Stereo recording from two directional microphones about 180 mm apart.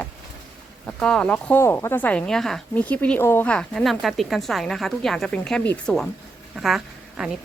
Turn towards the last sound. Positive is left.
turn(degrees=-5)  # may be behind; listen again after turning